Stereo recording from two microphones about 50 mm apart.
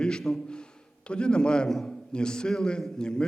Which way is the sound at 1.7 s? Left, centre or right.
Centre.